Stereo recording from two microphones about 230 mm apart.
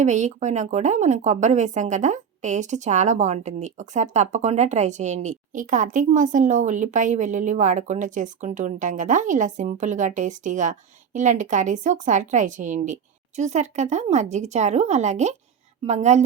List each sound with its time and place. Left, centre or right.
0.0 s speech: right